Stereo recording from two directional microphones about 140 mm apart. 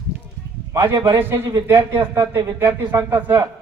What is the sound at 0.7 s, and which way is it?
A man's voice, 20° right (ahead or behind).